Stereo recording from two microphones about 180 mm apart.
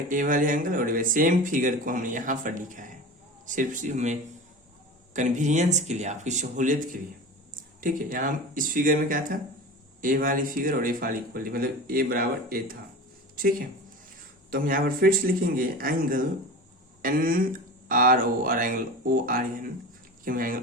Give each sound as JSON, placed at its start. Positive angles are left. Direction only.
{"t": 0.1, "sound": "speech", "side_deg": -45}